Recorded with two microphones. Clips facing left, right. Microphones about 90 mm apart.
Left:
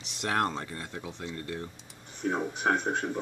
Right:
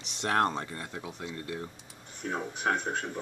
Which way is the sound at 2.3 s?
15° left (ahead or behind).